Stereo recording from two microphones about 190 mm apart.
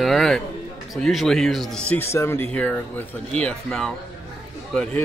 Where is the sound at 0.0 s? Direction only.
Centre (ahead or behind).